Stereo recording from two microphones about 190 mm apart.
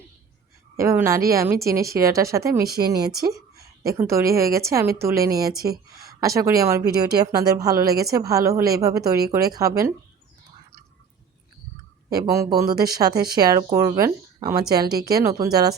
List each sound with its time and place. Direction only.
0.8 s speech: 15° right (ahead or behind)
5.5 s speech: 55° right (ahead or behind)
5.9 s a sound: 55° right (ahead or behind)
6.1 s speech: 15° right (ahead or behind)
12.0 s speech: 20° right (ahead or behind)